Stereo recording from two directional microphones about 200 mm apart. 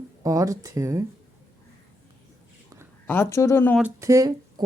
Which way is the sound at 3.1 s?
15° left (ahead or behind).